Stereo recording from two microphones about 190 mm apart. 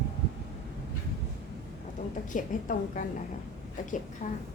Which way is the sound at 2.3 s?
45° left (ahead or behind).